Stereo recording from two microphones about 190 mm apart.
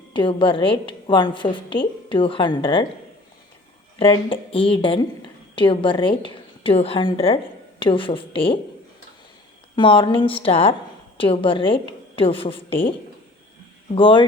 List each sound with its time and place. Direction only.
0.1 s a woman's voice: 25° left (ahead or behind)
3.9 s a woman's voice: 30° left (ahead or behind)
9.7 s a woman's voice: 25° left (ahead or behind)
13.9 s a woman's voice: 25° left (ahead or behind)